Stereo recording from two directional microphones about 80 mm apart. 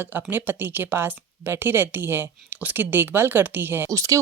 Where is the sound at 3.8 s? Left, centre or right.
Right.